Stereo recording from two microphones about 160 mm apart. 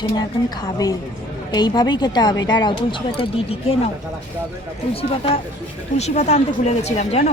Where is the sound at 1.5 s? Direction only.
25° left (ahead or behind).